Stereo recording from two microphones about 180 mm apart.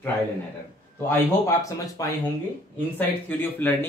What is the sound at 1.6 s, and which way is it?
Speech, 20° left (ahead or behind).